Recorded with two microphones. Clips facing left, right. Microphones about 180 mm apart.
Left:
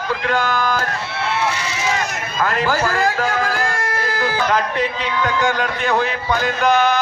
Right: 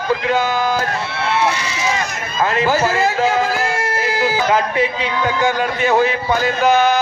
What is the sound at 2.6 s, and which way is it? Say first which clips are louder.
Speech: right 3 dB; 5° right (ahead or behind).